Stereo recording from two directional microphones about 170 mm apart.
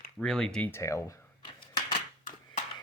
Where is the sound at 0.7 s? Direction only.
15° left (ahead or behind).